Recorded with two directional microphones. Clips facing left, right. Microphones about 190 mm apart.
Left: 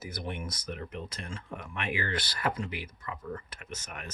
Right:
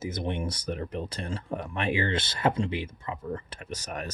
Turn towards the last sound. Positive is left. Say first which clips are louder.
# right 7 dB
turn(degrees=-35)  # may be behind; listen again after turning